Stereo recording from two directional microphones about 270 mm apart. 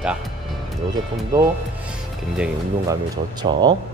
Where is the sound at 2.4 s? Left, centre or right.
Centre.